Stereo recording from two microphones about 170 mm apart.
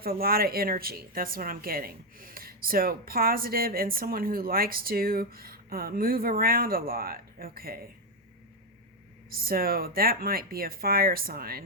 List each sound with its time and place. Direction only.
0.0 s a woman's voice: 60° right (ahead or behind)
9.3 s a woman's voice: 60° right (ahead or behind)